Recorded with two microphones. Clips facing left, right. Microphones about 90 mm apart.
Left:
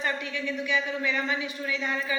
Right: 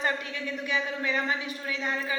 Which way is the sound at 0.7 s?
40° right (ahead or behind).